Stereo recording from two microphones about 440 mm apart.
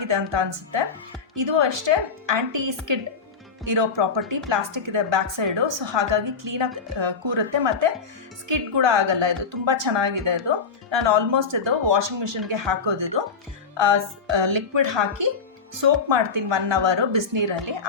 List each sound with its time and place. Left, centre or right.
0.0 s a woman's voice: right